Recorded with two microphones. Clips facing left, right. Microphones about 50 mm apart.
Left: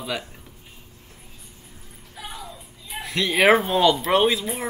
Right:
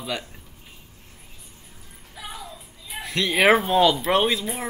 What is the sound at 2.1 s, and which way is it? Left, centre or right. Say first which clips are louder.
Speech: even; centre.